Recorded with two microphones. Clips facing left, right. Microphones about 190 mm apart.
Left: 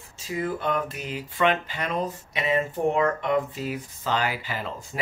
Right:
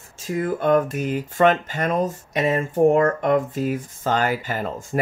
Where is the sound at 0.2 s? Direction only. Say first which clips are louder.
Right 5 dB; 50° right (ahead or behind).